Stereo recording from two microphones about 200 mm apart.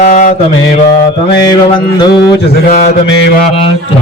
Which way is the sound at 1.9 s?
20° left (ahead or behind).